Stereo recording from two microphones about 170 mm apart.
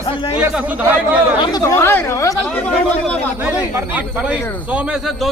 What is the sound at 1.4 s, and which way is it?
Speech, 20° left (ahead or behind).